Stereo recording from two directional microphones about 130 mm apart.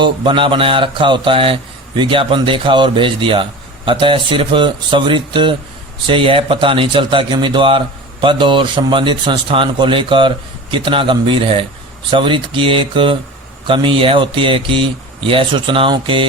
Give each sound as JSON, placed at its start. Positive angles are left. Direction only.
{"t": 0.0, "sound": "a man's voice", "side_deg": -40}